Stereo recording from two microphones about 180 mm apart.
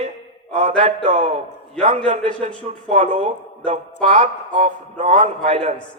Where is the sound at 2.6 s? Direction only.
40° right (ahead or behind).